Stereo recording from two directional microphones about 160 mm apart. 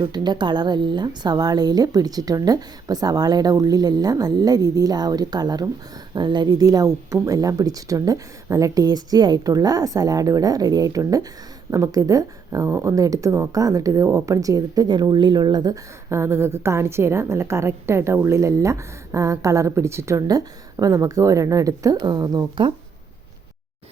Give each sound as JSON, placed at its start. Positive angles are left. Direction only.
{"t": 0.0, "sound": "speech", "side_deg": -25}